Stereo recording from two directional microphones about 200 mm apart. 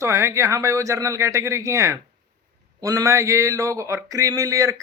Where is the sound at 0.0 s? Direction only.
15° right (ahead or behind).